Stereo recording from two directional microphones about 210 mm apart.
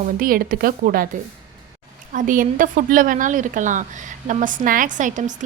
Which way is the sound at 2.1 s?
40° right (ahead or behind).